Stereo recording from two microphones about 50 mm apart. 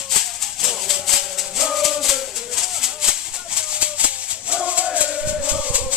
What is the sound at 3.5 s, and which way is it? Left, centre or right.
Maraca, right.